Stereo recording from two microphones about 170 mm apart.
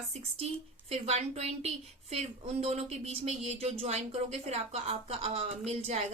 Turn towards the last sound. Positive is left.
turn(degrees=-40)  # may be behind; listen again after turning